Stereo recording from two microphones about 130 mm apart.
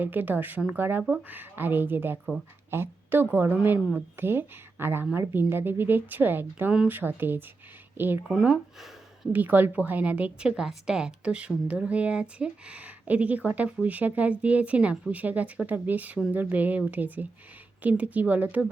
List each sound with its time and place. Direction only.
0.0 s a woman's voice: 15° right (ahead or behind)
8.3 s a woman's voice: 5° right (ahead or behind)